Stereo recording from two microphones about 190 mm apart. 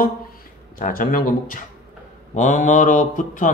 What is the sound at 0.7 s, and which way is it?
Speech, 45° left (ahead or behind).